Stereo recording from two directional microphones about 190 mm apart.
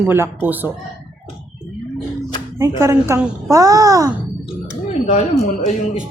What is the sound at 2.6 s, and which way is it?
Speech, 15° right (ahead or behind).